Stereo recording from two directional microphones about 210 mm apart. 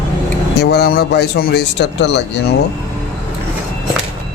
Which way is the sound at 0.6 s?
50° left (ahead or behind).